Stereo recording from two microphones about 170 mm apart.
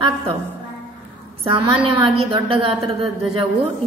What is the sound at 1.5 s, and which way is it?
A woman's voice, 30° right (ahead or behind).